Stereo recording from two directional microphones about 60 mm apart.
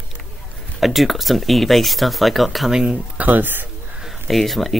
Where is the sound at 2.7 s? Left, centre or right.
Centre.